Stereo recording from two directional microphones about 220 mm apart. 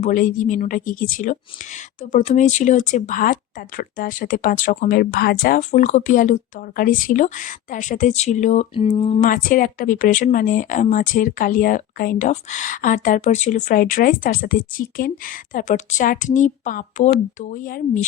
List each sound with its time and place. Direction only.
0.0 s speech: 35° left (ahead or behind)
9.3 s speech: 40° left (ahead or behind)